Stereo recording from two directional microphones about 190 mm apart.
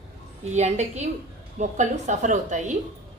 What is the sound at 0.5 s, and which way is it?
Speech, 35° right (ahead or behind).